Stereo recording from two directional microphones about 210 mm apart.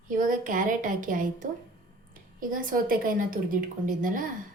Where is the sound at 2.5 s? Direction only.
40° right (ahead or behind).